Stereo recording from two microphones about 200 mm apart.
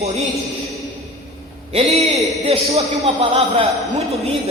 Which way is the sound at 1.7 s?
30° right (ahead or behind).